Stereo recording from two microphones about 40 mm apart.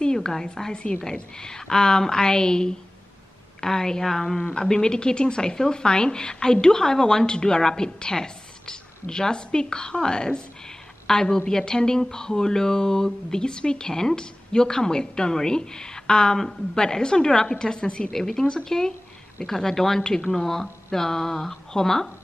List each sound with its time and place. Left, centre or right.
0.0 s speech: centre
18.1 s speech: centre